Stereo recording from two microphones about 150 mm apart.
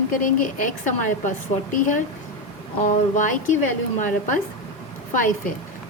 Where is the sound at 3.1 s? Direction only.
60° left (ahead or behind).